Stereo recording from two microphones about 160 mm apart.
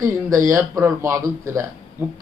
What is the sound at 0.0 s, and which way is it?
A man's voice, 20° right (ahead or behind).